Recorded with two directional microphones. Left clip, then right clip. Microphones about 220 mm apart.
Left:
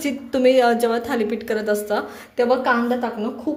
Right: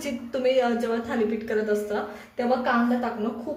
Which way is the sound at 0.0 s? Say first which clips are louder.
Left 7 dB; 35° left (ahead or behind).